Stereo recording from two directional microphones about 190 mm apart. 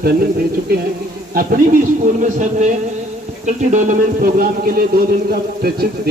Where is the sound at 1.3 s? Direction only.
45° right (ahead or behind).